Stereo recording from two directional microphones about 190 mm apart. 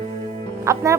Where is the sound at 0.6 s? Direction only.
15° right (ahead or behind).